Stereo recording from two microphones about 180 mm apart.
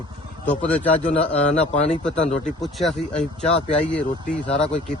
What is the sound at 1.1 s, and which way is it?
A man's voice, 40° left (ahead or behind).